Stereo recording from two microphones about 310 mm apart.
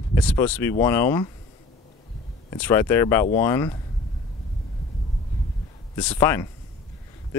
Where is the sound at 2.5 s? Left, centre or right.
Centre.